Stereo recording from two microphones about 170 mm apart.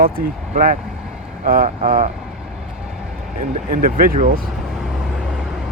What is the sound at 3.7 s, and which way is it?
Speech, 55° right (ahead or behind).